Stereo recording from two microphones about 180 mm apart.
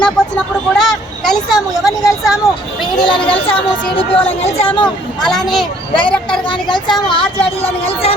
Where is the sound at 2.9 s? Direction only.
25° left (ahead or behind).